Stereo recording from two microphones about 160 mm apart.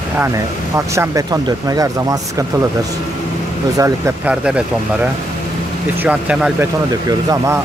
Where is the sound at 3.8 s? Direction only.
20° right (ahead or behind).